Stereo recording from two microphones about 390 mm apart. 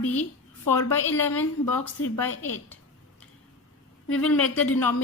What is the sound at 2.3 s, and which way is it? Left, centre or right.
Speech, left.